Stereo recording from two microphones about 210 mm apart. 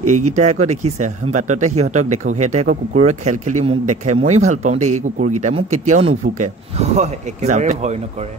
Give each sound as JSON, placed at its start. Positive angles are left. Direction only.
{"t": 0.0, "sound": "speech", "side_deg": -90}
{"t": 0.4, "sound": "speech", "side_deg": -30}